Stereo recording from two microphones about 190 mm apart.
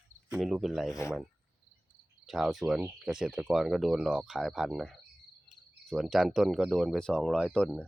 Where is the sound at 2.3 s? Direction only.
Centre (ahead or behind).